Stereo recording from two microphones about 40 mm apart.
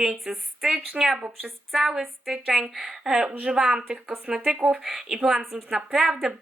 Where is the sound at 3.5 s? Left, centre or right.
Right.